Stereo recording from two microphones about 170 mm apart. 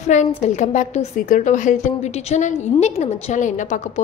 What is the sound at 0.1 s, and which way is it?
A woman's voice, 45° left (ahead or behind).